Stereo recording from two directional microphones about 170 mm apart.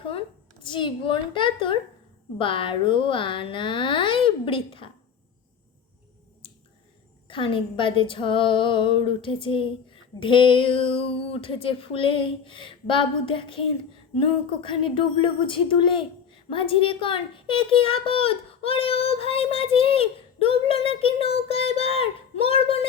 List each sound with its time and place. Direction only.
0.0 s a woman's voice: 30° left (ahead or behind)
7.3 s a child's voice: 30° left (ahead or behind)